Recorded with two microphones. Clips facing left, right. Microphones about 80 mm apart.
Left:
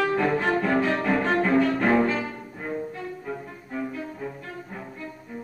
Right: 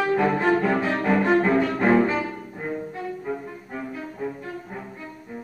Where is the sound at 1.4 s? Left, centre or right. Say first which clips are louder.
Right 1 dB; centre.